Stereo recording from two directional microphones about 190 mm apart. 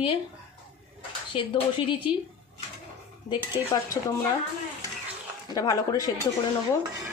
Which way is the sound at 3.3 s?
25° left (ahead or behind).